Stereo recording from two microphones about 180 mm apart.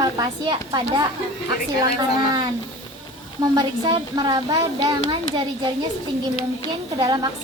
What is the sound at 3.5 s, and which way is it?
Speech, 20° right (ahead or behind).